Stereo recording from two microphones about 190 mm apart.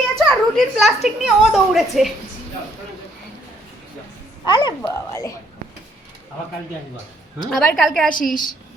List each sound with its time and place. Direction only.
0.3 s a woman's voice: centre (ahead or behind)
4.4 s speech: 25° left (ahead or behind)
7.5 s a woman's voice: 5° left (ahead or behind)
8.1 s a woman's voice: 45° left (ahead or behind)